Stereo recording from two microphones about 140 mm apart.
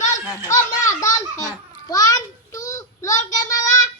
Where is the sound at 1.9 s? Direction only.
25° left (ahead or behind).